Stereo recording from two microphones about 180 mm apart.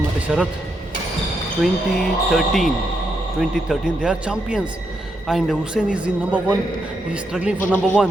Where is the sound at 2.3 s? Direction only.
Centre (ahead or behind).